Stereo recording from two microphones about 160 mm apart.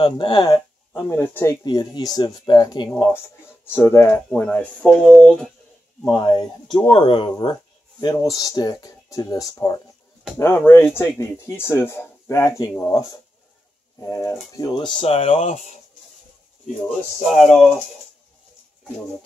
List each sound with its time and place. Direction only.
0.0 s speech: 30° left (ahead or behind)
3.6 s speech: 15° left (ahead or behind)
6.0 s speech: 25° left (ahead or behind); by 15.8 s 45° left (ahead or behind)